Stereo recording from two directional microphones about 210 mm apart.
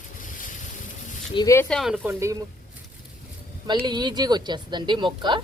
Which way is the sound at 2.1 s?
15° right (ahead or behind).